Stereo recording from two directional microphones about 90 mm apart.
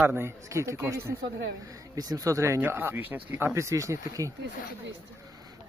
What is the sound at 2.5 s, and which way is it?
Speech, 25° right (ahead or behind).